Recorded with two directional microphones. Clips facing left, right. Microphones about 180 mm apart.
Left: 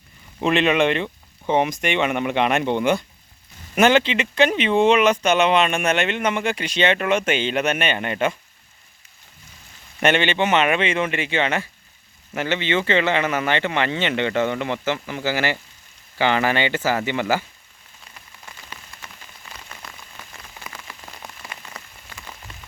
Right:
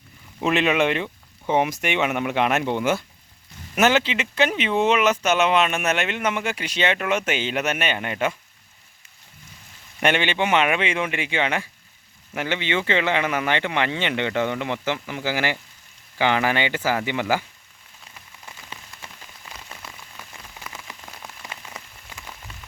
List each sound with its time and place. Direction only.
0.4 s speech: 5° right (ahead or behind)
10.0 s speech: 10° right (ahead or behind)
18.7 s rain on surface: 25° right (ahead or behind)
19.8 s rain on surface: 5° right (ahead or behind)